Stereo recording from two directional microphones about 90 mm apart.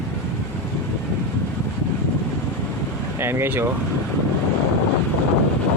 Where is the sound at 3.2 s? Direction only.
25° right (ahead or behind).